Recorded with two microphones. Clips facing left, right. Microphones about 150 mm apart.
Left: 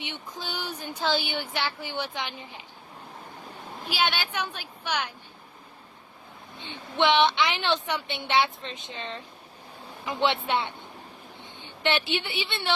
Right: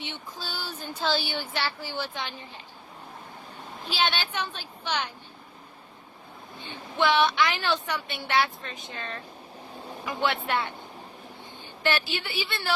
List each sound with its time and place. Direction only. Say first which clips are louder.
0.0 s speech: left 1 dB; 15° left (ahead or behind)
3.8 s speech: even; 10° left (ahead or behind)
6.6 s a woman's voice: left 1 dB; 20° left (ahead or behind)